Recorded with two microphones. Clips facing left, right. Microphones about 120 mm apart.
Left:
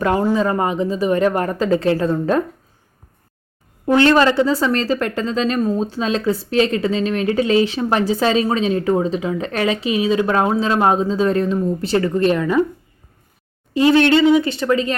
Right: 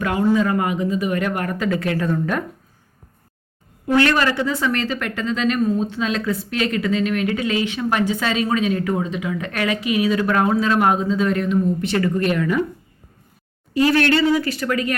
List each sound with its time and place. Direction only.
0.0 s speech: 35° left (ahead or behind)
3.8 s speech: 25° left (ahead or behind)
13.7 s speech: 20° left (ahead or behind)